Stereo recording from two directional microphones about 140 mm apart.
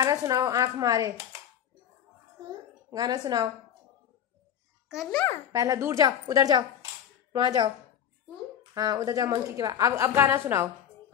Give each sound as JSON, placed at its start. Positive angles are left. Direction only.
{"t": 0.0, "sound": "a woman's voice", "side_deg": -25}
{"t": 2.9, "sound": "a woman's voice", "side_deg": -30}
{"t": 5.5, "sound": "a woman's voice", "side_deg": -25}
{"t": 8.7, "sound": "a woman's voice", "side_deg": -25}